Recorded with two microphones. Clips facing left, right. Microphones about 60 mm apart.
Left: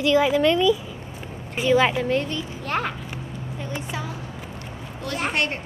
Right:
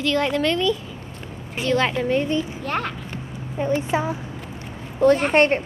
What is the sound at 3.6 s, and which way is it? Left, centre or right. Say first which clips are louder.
Speech: right 10 dB; right.